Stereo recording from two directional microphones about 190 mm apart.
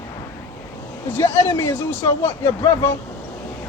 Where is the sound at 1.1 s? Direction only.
10° left (ahead or behind).